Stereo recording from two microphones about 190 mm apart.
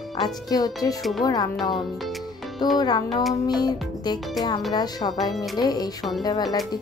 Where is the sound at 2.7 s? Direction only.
20° left (ahead or behind).